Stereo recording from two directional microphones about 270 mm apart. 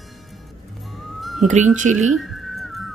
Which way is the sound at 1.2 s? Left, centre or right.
Centre.